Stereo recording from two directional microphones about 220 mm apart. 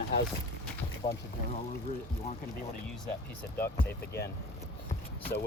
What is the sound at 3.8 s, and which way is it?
Speech, 10° left (ahead or behind).